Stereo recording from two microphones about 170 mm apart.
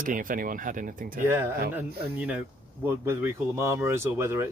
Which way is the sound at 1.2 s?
15° right (ahead or behind).